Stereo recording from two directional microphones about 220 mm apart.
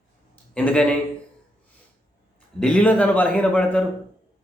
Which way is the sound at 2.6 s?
5° left (ahead or behind).